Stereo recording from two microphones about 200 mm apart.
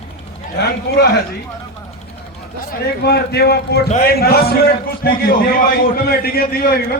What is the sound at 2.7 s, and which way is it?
A man's voice, 55° left (ahead or behind).